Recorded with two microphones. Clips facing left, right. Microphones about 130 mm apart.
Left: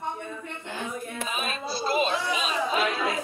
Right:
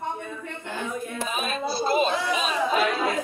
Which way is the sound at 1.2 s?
45° right (ahead or behind).